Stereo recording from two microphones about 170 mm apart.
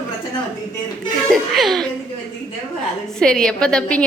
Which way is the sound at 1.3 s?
Centre (ahead or behind).